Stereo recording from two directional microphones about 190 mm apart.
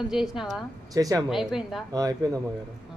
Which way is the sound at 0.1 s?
Centre (ahead or behind).